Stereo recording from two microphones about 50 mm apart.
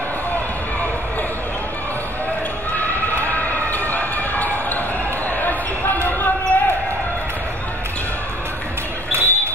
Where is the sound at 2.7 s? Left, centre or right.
Left.